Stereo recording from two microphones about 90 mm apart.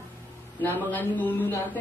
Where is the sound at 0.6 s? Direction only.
20° left (ahead or behind).